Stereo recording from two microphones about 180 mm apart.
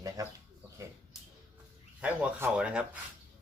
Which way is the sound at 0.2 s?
20° right (ahead or behind).